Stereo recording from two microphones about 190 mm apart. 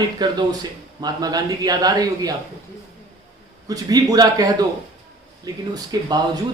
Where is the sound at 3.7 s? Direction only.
20° right (ahead or behind).